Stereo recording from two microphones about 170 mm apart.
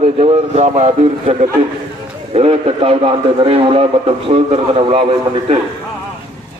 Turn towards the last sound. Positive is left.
turn(degrees=-35)  # may be behind; listen again after turning